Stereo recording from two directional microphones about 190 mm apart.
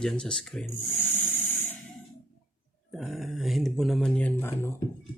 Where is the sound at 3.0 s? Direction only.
Centre (ahead or behind).